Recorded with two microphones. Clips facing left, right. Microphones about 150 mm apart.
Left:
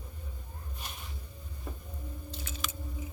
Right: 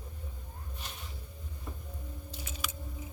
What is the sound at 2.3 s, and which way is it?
Biting, 10° right (ahead or behind).